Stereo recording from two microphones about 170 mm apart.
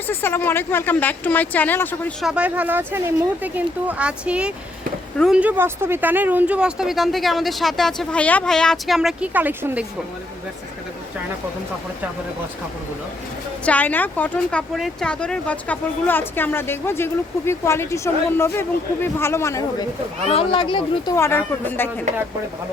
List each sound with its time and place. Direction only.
0.1 s speech: 15° left (ahead or behind)
2.2 s speech: 5° right (ahead or behind)
5.4 s speech: 10° right (ahead or behind)
13.7 s speech: 10° left (ahead or behind)
20.2 s speech: 35° left (ahead or behind)
21.2 s speech: 15° left (ahead or behind)